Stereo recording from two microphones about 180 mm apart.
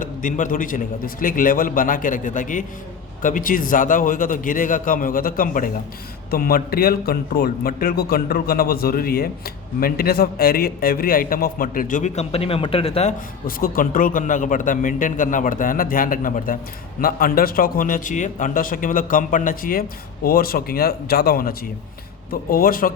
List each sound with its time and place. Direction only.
0.0 s a man's voice: 45° left (ahead or behind)
13.6 s a man's voice: 50° left (ahead or behind)